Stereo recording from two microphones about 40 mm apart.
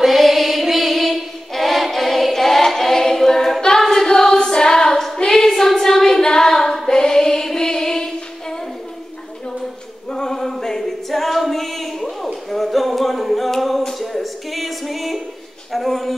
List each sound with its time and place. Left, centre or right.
0.0 s music: centre
3.8 s singing: centre
5.5 s female singing: centre
10.1 s a capella: centre
12.4 s music: centre
15.7 s a sound: centre